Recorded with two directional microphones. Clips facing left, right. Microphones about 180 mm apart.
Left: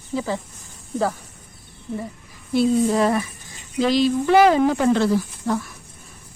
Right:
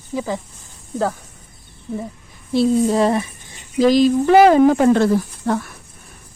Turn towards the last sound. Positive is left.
turn(degrees=-60)  # may be behind; listen again after turning